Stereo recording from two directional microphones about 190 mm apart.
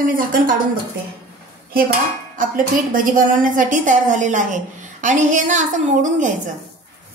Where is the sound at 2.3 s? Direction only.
45° right (ahead or behind).